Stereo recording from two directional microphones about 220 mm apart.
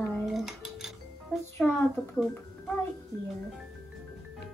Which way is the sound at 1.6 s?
Centre (ahead or behind).